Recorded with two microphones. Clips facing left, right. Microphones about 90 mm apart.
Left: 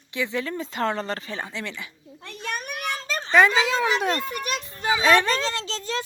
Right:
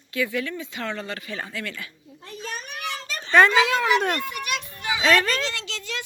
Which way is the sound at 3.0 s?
35° left (ahead or behind).